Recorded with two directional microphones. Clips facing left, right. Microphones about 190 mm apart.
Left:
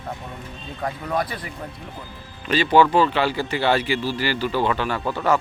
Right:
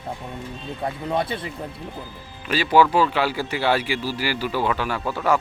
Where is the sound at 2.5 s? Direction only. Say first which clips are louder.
Left 1 dB; 5° right (ahead or behind).